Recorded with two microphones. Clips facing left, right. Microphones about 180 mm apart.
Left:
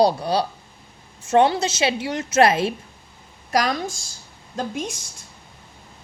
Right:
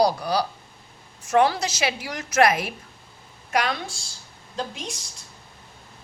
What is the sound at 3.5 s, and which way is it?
A woman's voice, 40° left (ahead or behind).